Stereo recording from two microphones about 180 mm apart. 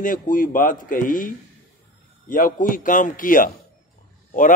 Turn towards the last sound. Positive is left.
turn(degrees=45)  # may be behind; listen again after turning